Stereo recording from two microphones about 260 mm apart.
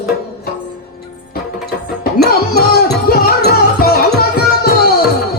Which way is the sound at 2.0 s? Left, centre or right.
Left.